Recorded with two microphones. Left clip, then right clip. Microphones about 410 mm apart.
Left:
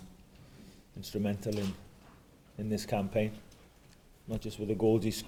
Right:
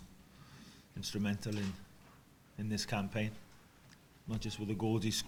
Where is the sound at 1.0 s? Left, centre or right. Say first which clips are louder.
Left 4 dB; right.